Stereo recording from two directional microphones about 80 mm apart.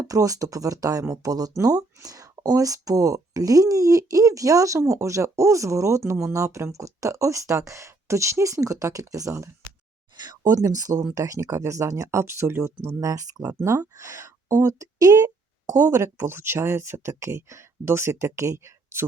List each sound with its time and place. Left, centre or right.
0.0 s speech: right
10.2 s speech: right
13.7 s speech: right
15.9 s speech: right